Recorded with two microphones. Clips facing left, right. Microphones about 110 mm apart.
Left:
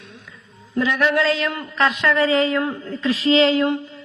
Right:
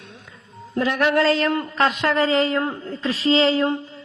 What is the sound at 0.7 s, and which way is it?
Speech, 45° right (ahead or behind).